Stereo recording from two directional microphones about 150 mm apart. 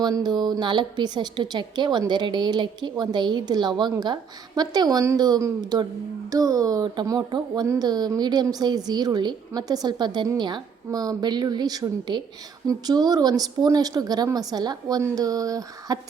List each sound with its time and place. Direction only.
0.0 s a woman's voice: 30° right (ahead or behind)